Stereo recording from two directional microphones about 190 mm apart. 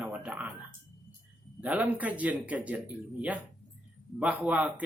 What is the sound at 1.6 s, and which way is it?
Speech, 5° right (ahead or behind).